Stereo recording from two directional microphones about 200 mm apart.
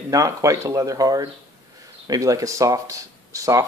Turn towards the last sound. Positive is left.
turn(degrees=-15)  # may be behind; listen again after turning